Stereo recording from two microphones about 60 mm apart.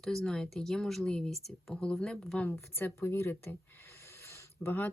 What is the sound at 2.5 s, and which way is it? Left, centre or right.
A woman's voice, left.